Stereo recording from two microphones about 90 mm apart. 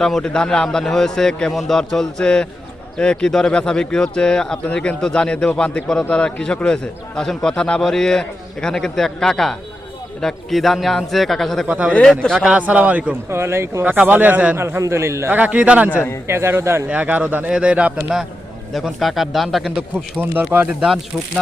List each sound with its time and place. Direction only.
0.0 s a man's voice: 5° left (ahead or behind)
12.5 s a man's voice: 15° right (ahead or behind)
13.3 s a man's voice: 30° right (ahead or behind)
14.6 s a man's voice: 30° right (ahead or behind)
15.3 s a man's voice: 15° right (ahead or behind)
15.9 s a man's voice: 20° left (ahead or behind)
16.2 s a man's voice: 30° right (ahead or behind)
16.9 s a man's voice: 15° right (ahead or behind); by 19.7 s centre (ahead or behind)
20.1 s a man's voice: 20° right (ahead or behind)
20.8 s a man's voice: 5° right (ahead or behind)